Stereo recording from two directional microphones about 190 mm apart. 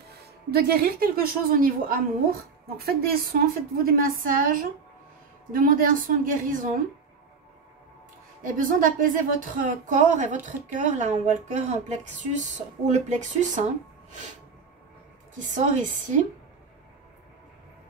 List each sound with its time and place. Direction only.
0.5 s a woman's voice: 55° right (ahead or behind)
8.5 s a woman's voice: 45° right (ahead or behind)
15.3 s a woman's voice: 40° right (ahead or behind)